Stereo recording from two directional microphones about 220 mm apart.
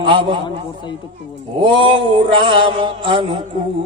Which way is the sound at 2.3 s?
25° right (ahead or behind).